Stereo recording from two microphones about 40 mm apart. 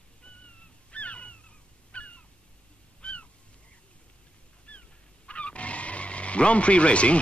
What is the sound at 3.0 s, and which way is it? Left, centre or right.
Goose, left.